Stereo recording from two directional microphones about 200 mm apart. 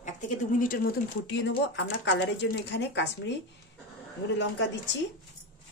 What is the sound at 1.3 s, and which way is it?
Speech, 65° left (ahead or behind).